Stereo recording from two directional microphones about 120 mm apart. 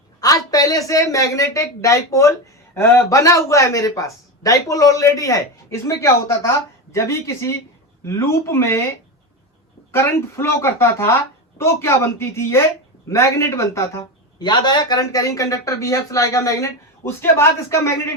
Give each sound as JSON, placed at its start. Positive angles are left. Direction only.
{"t": 0.2, "sound": "speech", "side_deg": 30}
{"t": 14.3, "sound": "speech", "side_deg": 35}